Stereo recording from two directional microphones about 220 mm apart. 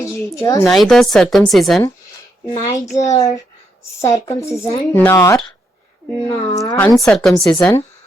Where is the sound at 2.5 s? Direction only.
25° left (ahead or behind).